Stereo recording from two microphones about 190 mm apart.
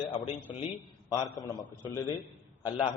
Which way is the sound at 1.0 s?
20° left (ahead or behind).